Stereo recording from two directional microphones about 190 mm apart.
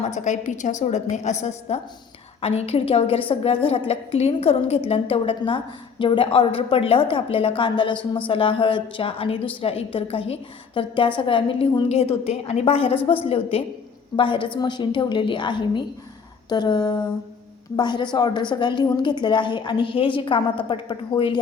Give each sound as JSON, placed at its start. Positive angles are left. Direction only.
{"t": 0.0, "sound": "a woman's voice", "side_deg": 40}